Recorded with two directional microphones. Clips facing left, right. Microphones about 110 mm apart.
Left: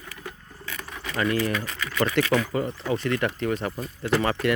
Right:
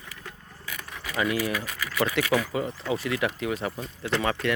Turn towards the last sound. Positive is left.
turn(degrees=5)  # may be behind; listen again after turning